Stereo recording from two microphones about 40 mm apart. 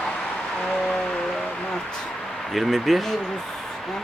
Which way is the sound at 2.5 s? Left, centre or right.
Centre.